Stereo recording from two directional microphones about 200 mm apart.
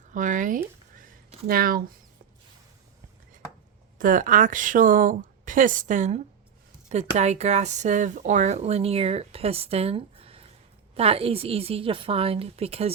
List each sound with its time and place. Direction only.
0.1 s speech: 40° right (ahead or behind)
0.9 s a sound: 40° right (ahead or behind)
1.5 s speech: 45° right (ahead or behind)
3.9 s a woman's voice: 40° right (ahead or behind)